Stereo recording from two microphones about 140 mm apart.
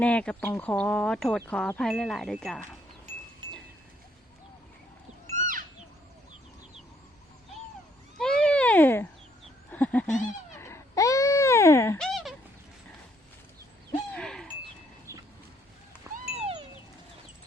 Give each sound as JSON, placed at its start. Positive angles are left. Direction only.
{"t": 0.0, "sound": "speech", "side_deg": 10}
{"t": 1.4, "sound": "wind chime", "side_deg": 10}
{"t": 5.4, "sound": "goat", "side_deg": -70}
{"t": 8.2, "sound": "a sound", "side_deg": 5}
{"t": 9.7, "sound": "speech", "side_deg": 10}
{"t": 10.6, "sound": "a sound", "side_deg": 20}
{"t": 11.9, "sound": "a sound", "side_deg": 0}
{"t": 14.1, "sound": "owl", "side_deg": 5}
{"t": 16.1, "sound": "cat", "side_deg": -20}